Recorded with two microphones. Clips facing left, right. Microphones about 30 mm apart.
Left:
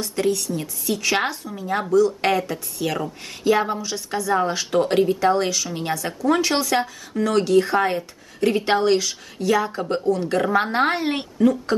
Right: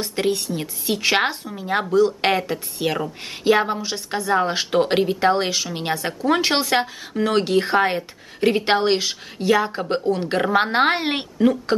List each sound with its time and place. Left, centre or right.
0.0 s speech: right